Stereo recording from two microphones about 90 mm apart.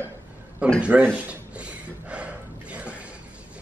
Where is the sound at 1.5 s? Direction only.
15° right (ahead or behind).